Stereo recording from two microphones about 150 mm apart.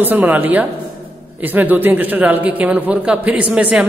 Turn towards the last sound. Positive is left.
turn(degrees=-5)  # may be behind; listen again after turning